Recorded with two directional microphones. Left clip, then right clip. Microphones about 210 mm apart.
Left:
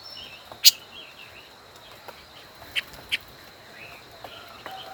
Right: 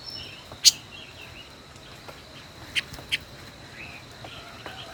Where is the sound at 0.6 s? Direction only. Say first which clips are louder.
Left 2 dB; 5° left (ahead or behind).